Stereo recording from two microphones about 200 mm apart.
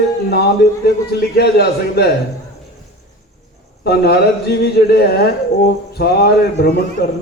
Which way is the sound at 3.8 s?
55° left (ahead or behind).